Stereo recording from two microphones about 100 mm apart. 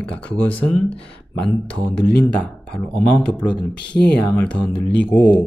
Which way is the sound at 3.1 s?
15° left (ahead or behind).